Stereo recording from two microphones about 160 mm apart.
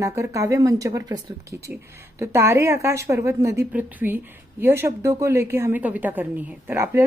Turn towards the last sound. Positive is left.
turn(degrees=-15)  # may be behind; listen again after turning